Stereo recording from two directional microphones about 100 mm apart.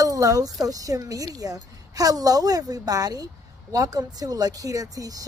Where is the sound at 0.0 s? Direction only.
35° right (ahead or behind).